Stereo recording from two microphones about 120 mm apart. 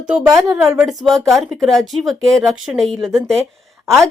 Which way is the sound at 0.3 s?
25° right (ahead or behind).